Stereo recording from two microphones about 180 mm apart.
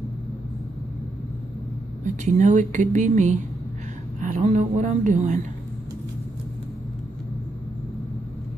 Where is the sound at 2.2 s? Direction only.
45° right (ahead or behind).